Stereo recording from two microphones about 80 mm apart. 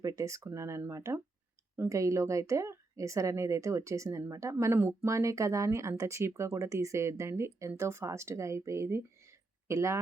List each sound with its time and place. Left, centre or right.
0.0 s speech: right